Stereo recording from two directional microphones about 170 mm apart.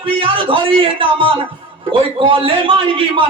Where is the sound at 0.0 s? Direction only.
30° right (ahead or behind).